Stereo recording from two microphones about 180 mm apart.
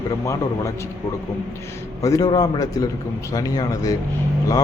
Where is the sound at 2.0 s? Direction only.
20° left (ahead or behind).